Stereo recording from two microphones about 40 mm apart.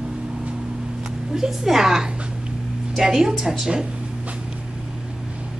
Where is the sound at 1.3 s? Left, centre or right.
Centre.